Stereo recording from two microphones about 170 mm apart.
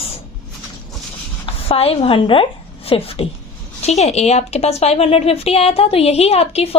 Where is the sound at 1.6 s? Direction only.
35° left (ahead or behind).